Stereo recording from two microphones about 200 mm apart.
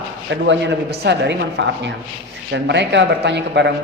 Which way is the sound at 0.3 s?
60° right (ahead or behind).